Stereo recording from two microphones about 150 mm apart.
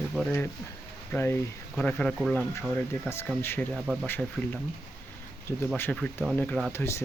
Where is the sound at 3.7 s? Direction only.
5° right (ahead or behind).